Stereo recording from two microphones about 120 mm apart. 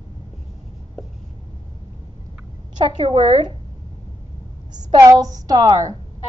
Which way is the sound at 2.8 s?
45° right (ahead or behind).